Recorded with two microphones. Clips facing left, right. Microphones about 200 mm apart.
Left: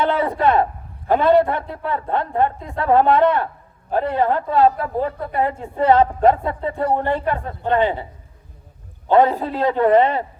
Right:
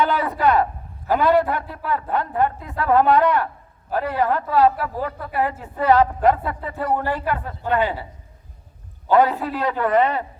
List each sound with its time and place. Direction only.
0.0 s a woman's voice: 30° left (ahead or behind)
9.0 s a woman's voice: 25° left (ahead or behind)